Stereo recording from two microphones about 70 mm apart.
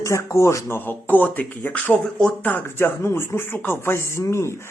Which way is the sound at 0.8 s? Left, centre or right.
Left.